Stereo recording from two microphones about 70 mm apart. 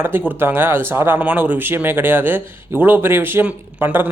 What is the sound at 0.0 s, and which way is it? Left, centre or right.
A man's voice, right.